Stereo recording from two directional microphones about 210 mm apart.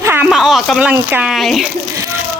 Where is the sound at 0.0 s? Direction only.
10° right (ahead or behind).